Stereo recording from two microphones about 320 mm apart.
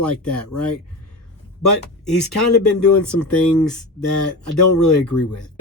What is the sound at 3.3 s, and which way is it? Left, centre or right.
Speech, centre.